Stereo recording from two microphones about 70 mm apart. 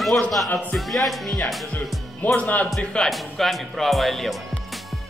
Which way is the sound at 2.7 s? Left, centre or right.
Centre.